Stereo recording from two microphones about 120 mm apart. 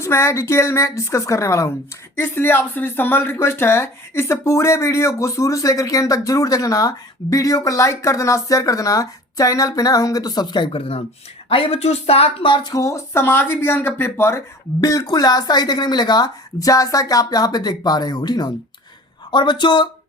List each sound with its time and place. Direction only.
0.0 s speech: 25° left (ahead or behind); by 12.7 s 45° left (ahead or behind)
12.7 s speech: 25° left (ahead or behind)